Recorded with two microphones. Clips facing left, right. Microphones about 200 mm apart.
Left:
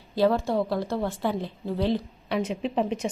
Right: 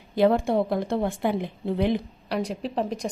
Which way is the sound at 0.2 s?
20° right (ahead or behind).